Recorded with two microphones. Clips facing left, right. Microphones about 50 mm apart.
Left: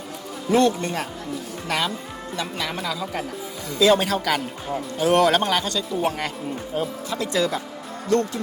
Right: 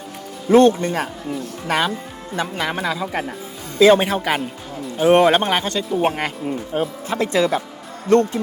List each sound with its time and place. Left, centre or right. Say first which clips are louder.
0.5 s speech: right 6 dB; right